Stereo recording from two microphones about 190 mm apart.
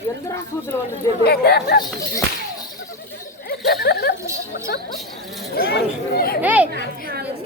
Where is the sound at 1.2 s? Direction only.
55° left (ahead or behind).